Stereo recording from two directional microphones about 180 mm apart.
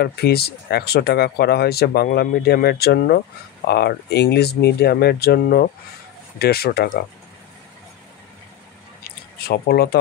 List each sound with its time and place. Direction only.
0.0 s speech: 60° left (ahead or behind)
9.4 s speech: 60° left (ahead or behind)